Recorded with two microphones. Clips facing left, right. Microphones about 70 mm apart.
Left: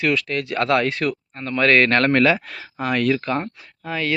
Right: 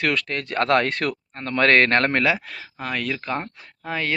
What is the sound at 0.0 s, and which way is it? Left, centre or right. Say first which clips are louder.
Speech: left 3 dB; right.